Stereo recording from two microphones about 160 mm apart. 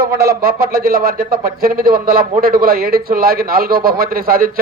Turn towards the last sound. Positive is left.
turn(degrees=-65)  # may be behind; listen again after turning